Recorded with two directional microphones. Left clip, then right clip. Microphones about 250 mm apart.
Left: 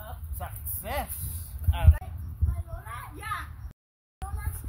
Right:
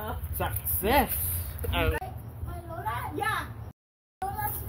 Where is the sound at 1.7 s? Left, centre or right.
Left.